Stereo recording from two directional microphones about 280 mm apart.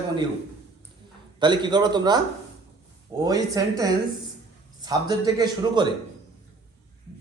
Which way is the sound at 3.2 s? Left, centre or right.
Centre.